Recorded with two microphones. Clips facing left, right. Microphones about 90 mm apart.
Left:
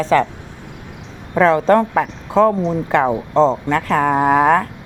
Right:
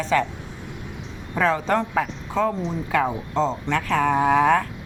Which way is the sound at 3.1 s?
35° left (ahead or behind).